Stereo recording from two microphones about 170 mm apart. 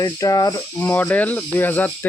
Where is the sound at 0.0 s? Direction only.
20° left (ahead or behind).